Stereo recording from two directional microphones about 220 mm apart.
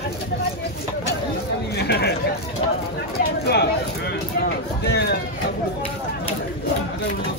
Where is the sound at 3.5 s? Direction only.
50° left (ahead or behind).